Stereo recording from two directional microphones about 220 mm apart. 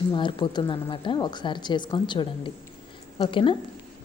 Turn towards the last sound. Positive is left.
turn(degrees=25)  # may be behind; listen again after turning